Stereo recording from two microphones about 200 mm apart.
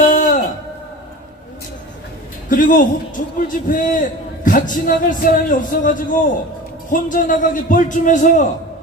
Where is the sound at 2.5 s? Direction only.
40° left (ahead or behind).